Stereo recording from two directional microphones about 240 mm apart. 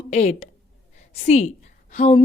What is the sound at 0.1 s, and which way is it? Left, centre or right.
A woman's voice, left.